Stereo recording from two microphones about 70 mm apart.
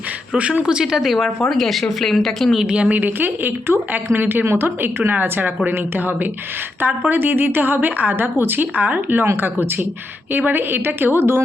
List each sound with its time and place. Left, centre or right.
0.3 s speech: centre
2.6 s a woman's voice: centre; by 11.4 s right